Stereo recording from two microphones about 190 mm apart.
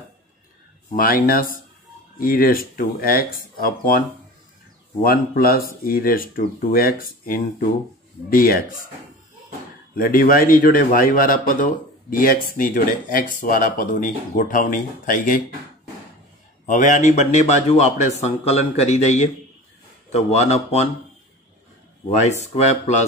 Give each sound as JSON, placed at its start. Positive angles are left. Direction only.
{"t": 0.9, "sound": "a man's voice", "side_deg": 50}
{"t": 5.0, "sound": "a man's voice", "side_deg": 50}
{"t": 9.9, "sound": "a man's voice", "side_deg": 50}
{"t": 16.6, "sound": "a man's voice", "side_deg": 40}
{"t": 22.5, "sound": "a man's voice", "side_deg": 35}